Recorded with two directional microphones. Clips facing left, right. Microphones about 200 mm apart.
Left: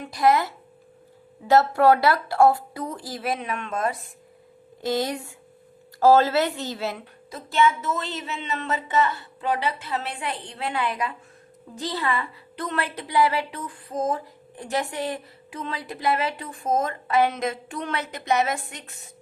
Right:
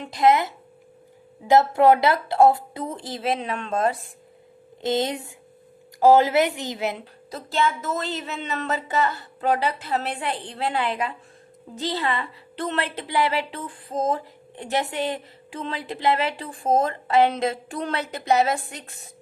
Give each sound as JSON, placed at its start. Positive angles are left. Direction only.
{"t": 0.0, "sound": "a woman's voice", "side_deg": -25}
{"t": 7.0, "sound": "a woman's voice", "side_deg": -35}